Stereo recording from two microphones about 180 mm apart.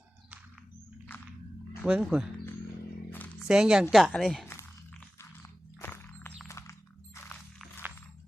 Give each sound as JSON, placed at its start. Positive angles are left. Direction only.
{"t": 1.8, "sound": "a woman's voice", "side_deg": -5}
{"t": 3.4, "sound": "a woman's voice", "side_deg": -5}
{"t": 5.4, "sound": "music", "side_deg": 15}
{"t": 7.2, "sound": "a sound", "side_deg": 10}